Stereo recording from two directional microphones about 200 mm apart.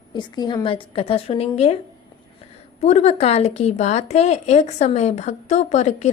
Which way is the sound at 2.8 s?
35° left (ahead or behind).